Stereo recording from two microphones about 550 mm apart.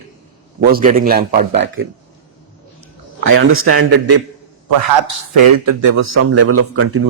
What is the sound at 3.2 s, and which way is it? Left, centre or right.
Speech, right.